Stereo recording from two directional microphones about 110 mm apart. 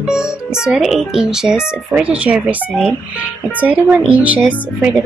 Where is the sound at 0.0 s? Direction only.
5° right (ahead or behind).